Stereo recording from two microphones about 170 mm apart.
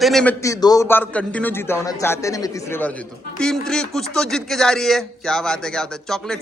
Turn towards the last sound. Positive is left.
turn(degrees=5)  # may be behind; listen again after turning